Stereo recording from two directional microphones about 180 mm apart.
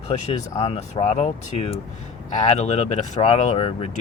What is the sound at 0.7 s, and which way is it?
Speech, 35° left (ahead or behind).